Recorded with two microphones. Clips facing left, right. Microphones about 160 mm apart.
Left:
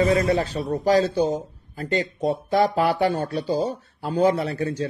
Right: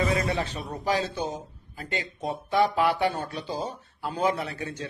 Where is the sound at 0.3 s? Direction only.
40° left (ahead or behind).